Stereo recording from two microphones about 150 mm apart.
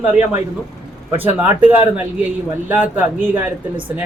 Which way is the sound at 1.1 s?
10° right (ahead or behind).